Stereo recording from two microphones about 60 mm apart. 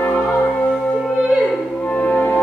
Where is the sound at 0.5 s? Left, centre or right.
Centre.